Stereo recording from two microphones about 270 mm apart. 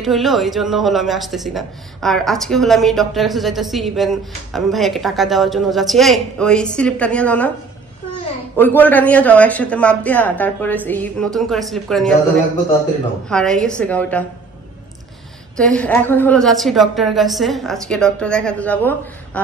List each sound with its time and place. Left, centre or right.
0.0 s speech: centre
8.5 s speech: centre
13.3 s speech: centre
15.5 s speech: centre